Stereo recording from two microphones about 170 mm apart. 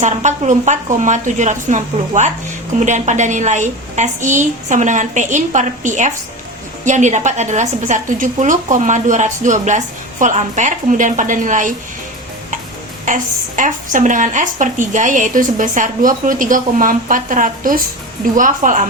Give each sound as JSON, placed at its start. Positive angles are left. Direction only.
{"t": 0.0, "sound": "a woman's voice", "side_deg": -45}
{"t": 13.1, "sound": "a woman's voice", "side_deg": -50}